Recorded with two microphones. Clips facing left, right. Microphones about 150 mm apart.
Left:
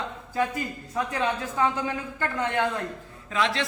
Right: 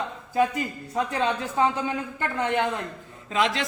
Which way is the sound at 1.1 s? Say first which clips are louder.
Right 2 dB; 25° right (ahead or behind).